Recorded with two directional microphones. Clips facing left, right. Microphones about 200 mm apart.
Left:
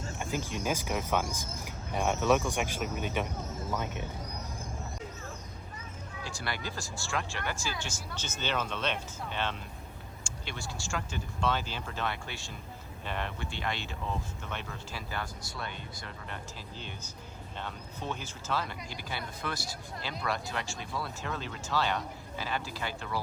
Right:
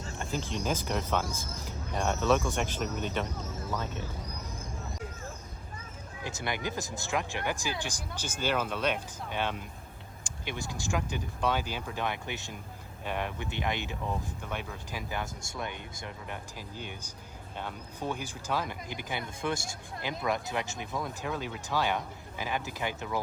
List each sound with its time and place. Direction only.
0.2 s speech: 15° left (ahead or behind)
6.2 s speech: 20° right (ahead or behind)